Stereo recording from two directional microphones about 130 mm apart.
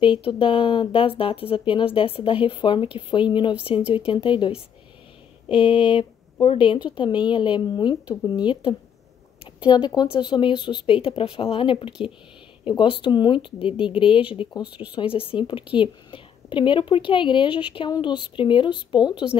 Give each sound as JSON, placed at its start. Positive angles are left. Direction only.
{"t": 0.0, "sound": "speech", "side_deg": 40}